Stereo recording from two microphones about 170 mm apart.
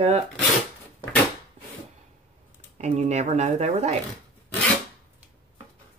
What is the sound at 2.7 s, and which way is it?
Speech, 40° right (ahead or behind).